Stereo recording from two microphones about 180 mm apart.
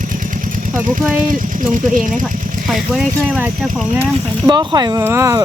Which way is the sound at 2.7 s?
Centre (ahead or behind).